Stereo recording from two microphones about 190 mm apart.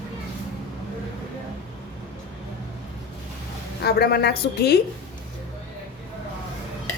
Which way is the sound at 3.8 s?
55° left (ahead or behind).